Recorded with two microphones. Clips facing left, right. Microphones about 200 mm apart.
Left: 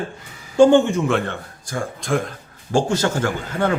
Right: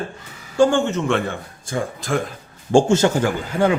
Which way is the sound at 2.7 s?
25° right (ahead or behind).